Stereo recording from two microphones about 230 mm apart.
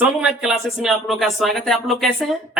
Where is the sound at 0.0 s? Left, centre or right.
Centre.